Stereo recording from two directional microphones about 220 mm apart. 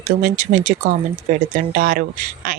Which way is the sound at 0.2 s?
35° right (ahead or behind).